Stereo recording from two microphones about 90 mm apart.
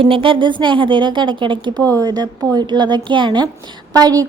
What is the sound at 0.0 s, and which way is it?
A woman's voice, 85° right.